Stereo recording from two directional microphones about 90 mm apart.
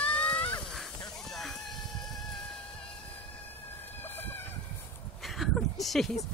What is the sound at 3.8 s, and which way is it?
Chicken, 20° left (ahead or behind).